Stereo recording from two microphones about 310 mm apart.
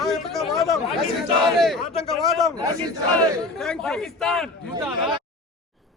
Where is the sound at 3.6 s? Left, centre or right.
Centre.